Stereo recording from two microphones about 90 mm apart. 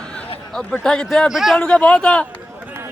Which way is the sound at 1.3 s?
5° right (ahead or behind).